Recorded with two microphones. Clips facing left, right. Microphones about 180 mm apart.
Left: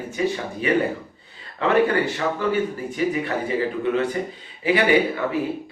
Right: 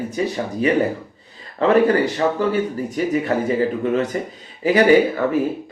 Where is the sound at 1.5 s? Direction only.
40° right (ahead or behind).